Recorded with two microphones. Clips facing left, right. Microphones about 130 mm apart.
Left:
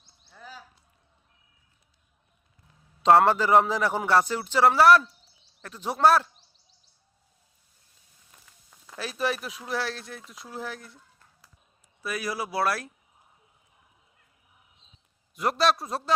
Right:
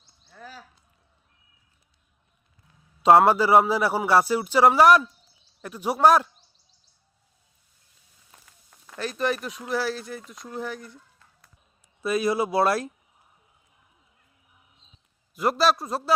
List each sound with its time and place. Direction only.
0.3 s a sound: 10° left (ahead or behind)
3.0 s a man's voice: 10° right (ahead or behind)
9.0 s speech: 5° left (ahead or behind)
12.0 s speech: 25° right (ahead or behind)
15.4 s speech: centre (ahead or behind)